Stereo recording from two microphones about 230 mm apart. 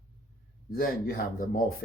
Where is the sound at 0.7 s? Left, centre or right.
Left.